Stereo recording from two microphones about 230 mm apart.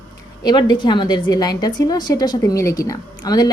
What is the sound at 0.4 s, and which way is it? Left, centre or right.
A woman's voice, centre.